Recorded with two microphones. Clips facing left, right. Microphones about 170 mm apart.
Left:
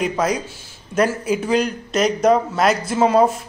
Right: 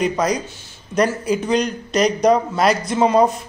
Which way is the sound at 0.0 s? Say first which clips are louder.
Right 1 dB; 5° left (ahead or behind).